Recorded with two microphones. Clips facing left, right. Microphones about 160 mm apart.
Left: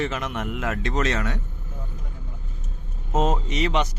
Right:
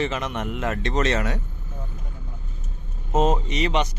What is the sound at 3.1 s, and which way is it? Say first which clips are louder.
Speech: right 2 dB; centre (ahead or behind).